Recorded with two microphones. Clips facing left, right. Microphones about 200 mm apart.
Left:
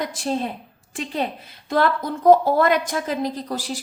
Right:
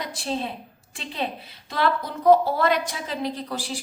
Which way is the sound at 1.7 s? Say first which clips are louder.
Left 4 dB; 45° left (ahead or behind).